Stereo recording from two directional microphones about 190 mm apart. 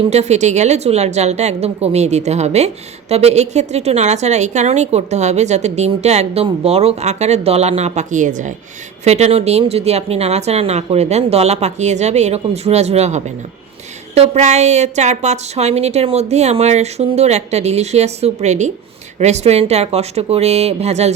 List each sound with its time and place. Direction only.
0.1 s a woman's voice: 35° right (ahead or behind)